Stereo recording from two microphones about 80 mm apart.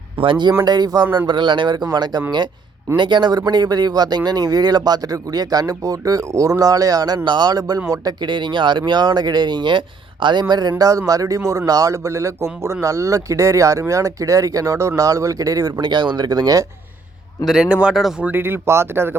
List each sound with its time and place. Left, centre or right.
0.2 s speech: right
0.6 s speech: right
1.0 s speech: right
1.3 s speech: right
2.9 s speech: right
7.3 s speech: right
10.5 s speech: right
15.8 s speech: right
17.4 s a man's voice: centre
18.2 s speech: right